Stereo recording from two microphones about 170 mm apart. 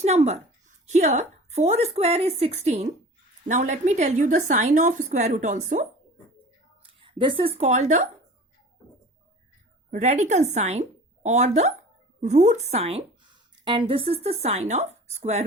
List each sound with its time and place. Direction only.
0.0 s a child's voice: 40° right (ahead or behind)
7.0 s a sound: 30° right (ahead or behind)
7.6 s a woman's voice: 45° right (ahead or behind)
9.9 s a woman's voice: 45° right (ahead or behind)